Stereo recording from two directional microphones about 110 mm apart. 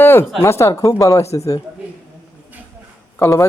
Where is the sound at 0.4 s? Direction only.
25° left (ahead or behind).